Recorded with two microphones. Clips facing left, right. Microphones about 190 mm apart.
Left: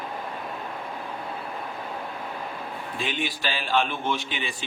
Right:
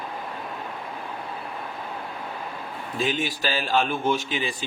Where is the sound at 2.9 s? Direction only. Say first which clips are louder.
Right 5 dB; 40° right (ahead or behind).